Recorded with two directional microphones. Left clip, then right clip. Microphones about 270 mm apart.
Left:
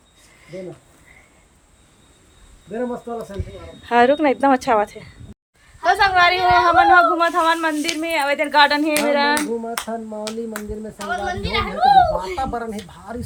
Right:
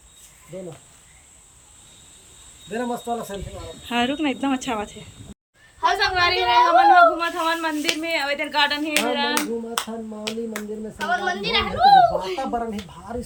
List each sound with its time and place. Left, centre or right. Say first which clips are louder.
3.1 s speech: right 2 dB; centre
3.8 s speech: left 9 dB; centre
10.2 s a child's voice: left 1 dB; centre